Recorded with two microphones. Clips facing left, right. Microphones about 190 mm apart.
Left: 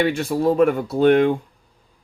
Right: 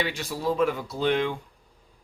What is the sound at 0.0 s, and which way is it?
Speech, 55° left (ahead or behind).